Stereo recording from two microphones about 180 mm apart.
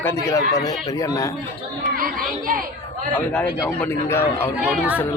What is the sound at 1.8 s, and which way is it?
Speech, 50° right (ahead or behind).